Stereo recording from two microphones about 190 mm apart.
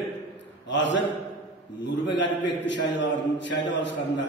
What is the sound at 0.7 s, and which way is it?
Speech, 70° left (ahead or behind).